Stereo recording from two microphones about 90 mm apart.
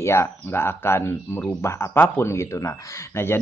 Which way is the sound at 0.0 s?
30° left (ahead or behind).